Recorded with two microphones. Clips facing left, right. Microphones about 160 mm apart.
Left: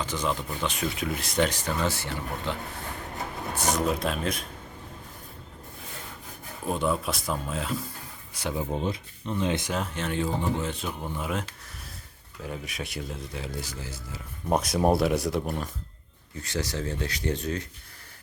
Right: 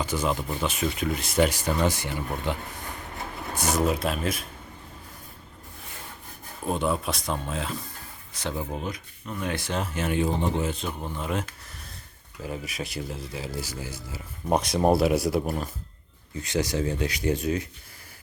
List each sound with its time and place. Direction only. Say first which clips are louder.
0.0 s speech: right 2 dB; 10° right (ahead or behind)
6.7 s speech: right 1 dB; centre (ahead or behind); by 9.7 s 20° left (ahead or behind)
9.7 s speech: right 2 dB; 5° right (ahead or behind)
10.7 s speech: right 1 dB; centre (ahead or behind)
14.5 s speech: right 1 dB; centre (ahead or behind)
16.4 s speech: right 5 dB; 15° right (ahead or behind)